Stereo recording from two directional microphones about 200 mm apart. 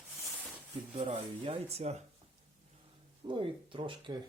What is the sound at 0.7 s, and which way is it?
Speech, 25° right (ahead or behind).